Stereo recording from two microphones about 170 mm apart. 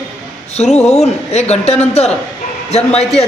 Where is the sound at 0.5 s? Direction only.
40° left (ahead or behind).